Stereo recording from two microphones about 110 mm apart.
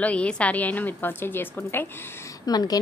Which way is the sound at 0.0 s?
10° left (ahead or behind).